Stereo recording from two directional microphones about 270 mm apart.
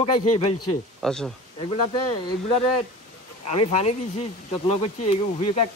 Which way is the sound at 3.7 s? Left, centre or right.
Left.